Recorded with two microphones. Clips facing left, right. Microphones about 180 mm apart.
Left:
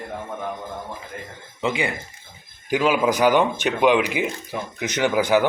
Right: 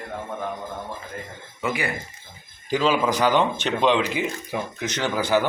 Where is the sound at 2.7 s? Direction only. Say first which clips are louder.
Left 2 dB; 10° left (ahead or behind).